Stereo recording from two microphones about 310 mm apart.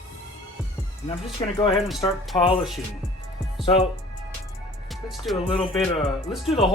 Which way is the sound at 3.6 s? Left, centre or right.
Centre.